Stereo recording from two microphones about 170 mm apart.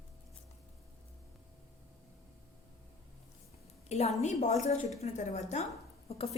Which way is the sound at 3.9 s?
40° left (ahead or behind).